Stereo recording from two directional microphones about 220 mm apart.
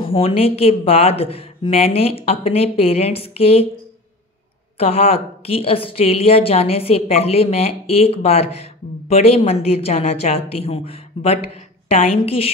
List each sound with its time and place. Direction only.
0.0 s a woman's voice: 25° left (ahead or behind)
4.7 s a woman's voice: 25° left (ahead or behind)